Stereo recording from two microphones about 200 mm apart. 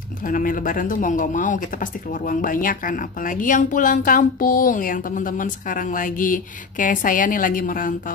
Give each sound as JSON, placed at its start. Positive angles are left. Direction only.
{"t": 0.2, "sound": "speech", "side_deg": 45}